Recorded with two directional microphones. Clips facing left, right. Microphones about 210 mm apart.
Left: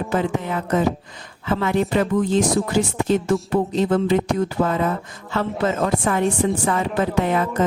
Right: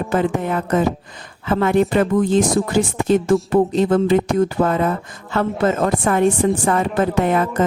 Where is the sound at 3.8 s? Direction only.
50° right (ahead or behind).